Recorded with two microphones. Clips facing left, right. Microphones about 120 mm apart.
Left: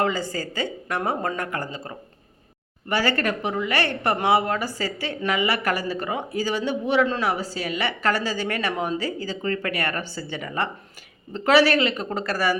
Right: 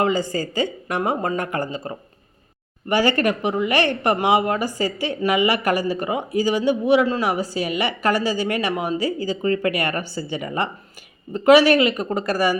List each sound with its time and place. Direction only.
0.0 s a woman's voice: 15° right (ahead or behind)
2.9 s a woman's voice: 15° right (ahead or behind)